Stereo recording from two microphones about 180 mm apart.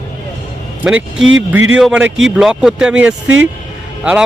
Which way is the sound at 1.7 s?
5° right (ahead or behind).